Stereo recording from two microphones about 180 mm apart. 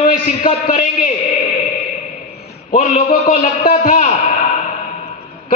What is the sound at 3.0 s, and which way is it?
A man's voice, 50° left (ahead or behind).